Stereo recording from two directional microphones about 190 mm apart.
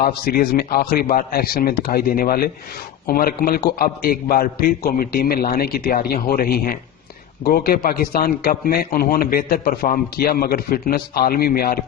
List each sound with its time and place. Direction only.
0.0 s a man's voice: 50° left (ahead or behind)